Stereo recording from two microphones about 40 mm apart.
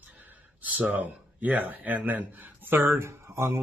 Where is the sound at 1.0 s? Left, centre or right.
Right.